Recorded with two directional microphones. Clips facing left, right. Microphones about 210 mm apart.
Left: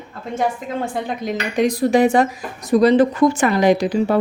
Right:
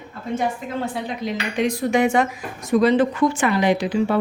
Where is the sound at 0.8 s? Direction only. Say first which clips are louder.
Left 3 dB; 45° left (ahead or behind).